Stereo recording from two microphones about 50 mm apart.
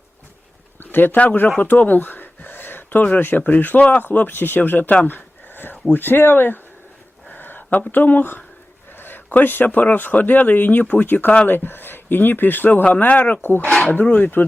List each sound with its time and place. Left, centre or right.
0.8 s speech: left
1.1 s speech: left
1.5 s a sound: left
3.2 s speech: left
5.0 s a sound: left
5.9 s speech: left
7.3 s a sound: left
8.9 s speech: left
13.4 s speech: left